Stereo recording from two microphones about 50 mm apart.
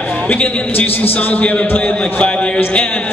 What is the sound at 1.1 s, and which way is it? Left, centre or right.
A man's voice, left.